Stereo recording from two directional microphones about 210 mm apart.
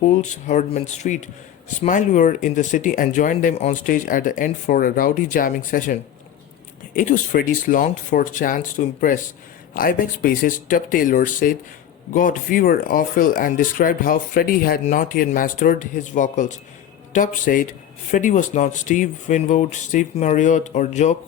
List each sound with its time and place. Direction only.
0.0 s speech: 35° left (ahead or behind)